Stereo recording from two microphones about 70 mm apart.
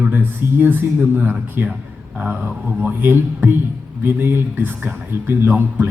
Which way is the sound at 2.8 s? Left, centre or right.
Right.